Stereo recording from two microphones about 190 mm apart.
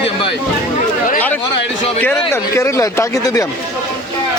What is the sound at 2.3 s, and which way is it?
Speech, 15° left (ahead or behind).